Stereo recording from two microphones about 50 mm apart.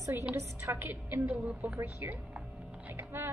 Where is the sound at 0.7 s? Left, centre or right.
Right.